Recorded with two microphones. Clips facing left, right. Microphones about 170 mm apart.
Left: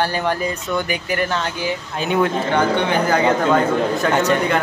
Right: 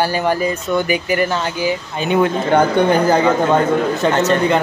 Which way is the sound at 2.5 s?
45° right (ahead or behind).